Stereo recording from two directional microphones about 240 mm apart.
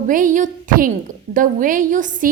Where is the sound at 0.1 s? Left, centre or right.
Right.